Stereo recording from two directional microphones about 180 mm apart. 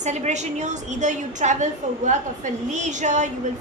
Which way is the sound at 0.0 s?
40° right (ahead or behind).